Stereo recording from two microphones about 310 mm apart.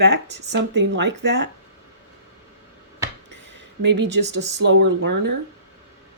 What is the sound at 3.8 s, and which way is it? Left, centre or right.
Speech, right.